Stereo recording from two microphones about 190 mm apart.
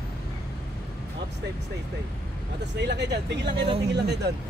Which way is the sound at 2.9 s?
65° right (ahead or behind).